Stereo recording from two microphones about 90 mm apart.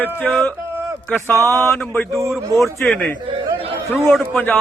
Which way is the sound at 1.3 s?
35° right (ahead or behind).